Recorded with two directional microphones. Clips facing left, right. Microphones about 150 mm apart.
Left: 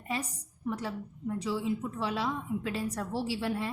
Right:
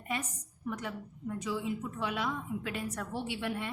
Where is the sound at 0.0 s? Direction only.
30° left (ahead or behind).